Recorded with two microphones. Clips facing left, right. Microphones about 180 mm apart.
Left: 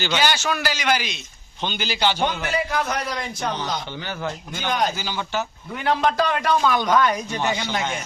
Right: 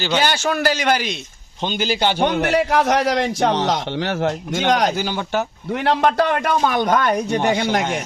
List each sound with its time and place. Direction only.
0.2 s a man's voice: 50° right (ahead or behind); by 5.0 s 75° right (ahead or behind)
5.0 s a man's voice: 55° right (ahead or behind)